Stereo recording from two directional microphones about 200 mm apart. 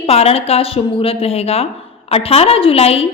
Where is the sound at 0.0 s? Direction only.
30° left (ahead or behind).